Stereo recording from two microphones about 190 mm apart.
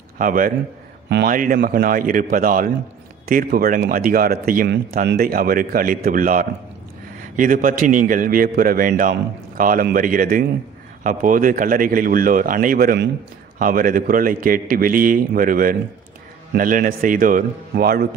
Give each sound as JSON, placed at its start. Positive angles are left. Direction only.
{"t": 0.2, "sound": "speech", "side_deg": -45}